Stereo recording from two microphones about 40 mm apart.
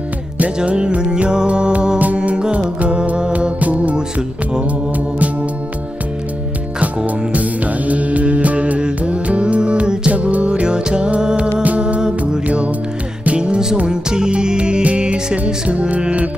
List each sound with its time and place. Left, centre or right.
0.7 s music: right
3.3 s music: right
7.3 s music: right
13.4 s music: centre